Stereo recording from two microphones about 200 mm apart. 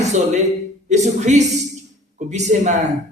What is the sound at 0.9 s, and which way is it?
A man's voice, 35° right (ahead or behind).